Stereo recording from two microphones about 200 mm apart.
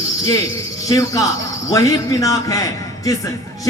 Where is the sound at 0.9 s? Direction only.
15° left (ahead or behind).